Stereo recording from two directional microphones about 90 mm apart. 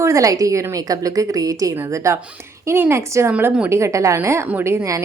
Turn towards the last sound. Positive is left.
turn(degrees=-35)  # may be behind; listen again after turning